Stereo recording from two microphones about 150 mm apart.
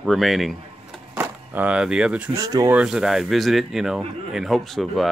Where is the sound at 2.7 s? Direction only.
5° right (ahead or behind).